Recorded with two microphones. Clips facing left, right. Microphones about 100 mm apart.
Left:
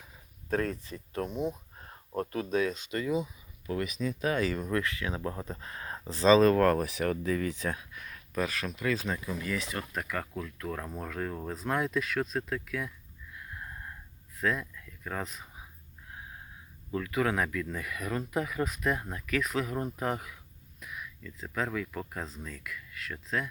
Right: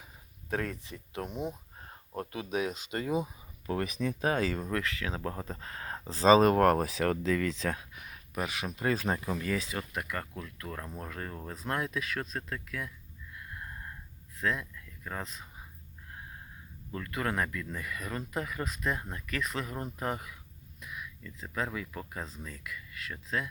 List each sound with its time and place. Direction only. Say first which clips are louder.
1.4 s a sound: left 3 dB; 25° right (ahead or behind)
2.1 s speech: left 5 dB; 45° left (ahead or behind)
2.5 s speech: left 1 dB; 20° right (ahead or behind)
3.2 s speech: even; 35° right (ahead or behind)
6.4 s speech: even; 25° right (ahead or behind)
6.9 s speech: right 1 dB; 80° right
7.9 s a sound: left 3 dB; 15° right (ahead or behind)
9.0 s speech: right 2 dB; 40° right (ahead or behind)
9.9 s speech: left 2 dB; centre (ahead or behind)
13.3 s a sound: left 1 dB; centre (ahead or behind)
14.3 s speech: left 2 dB; centre (ahead or behind)
16.9 s speech: left 4 dB; 5° left (ahead or behind)